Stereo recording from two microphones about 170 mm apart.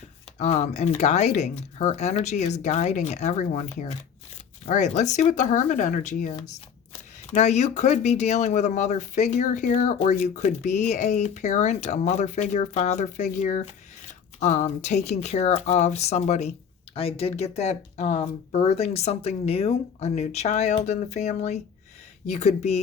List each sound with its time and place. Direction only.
0.3 s speech: 40° left (ahead or behind)